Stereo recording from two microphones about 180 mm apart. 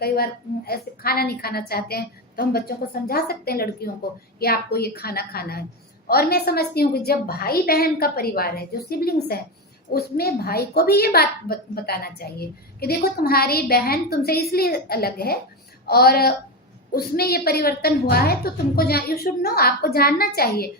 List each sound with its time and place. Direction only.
0.0 s a woman's voice: 60° left (ahead or behind)